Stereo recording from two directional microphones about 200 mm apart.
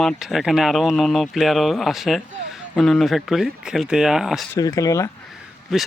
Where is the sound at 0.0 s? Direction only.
Centre (ahead or behind).